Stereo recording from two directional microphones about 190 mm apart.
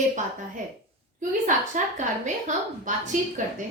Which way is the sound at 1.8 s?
45° right (ahead or behind).